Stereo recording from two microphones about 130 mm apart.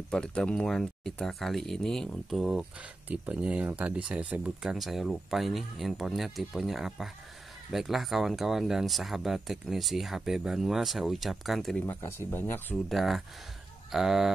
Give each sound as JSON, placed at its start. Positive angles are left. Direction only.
{"t": 0.1, "sound": "speech", "side_deg": 5}
{"t": 11.8, "sound": "speech", "side_deg": 20}
{"t": 12.8, "sound": "speech", "side_deg": 0}